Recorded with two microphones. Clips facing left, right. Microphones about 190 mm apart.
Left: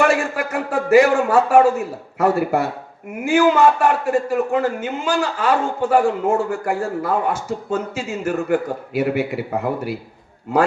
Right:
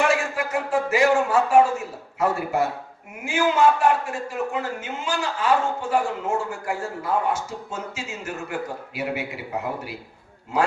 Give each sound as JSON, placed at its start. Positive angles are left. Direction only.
{"t": 0.0, "sound": "a man's voice", "side_deg": 60}